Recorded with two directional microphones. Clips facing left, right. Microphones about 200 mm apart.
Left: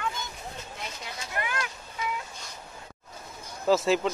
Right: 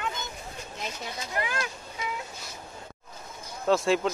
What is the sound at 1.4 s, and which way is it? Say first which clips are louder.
Vehicle: right 1 dB; 30° right (ahead or behind).